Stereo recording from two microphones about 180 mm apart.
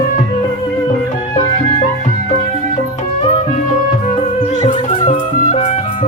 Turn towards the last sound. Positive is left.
turn(degrees=35)  # may be behind; listen again after turning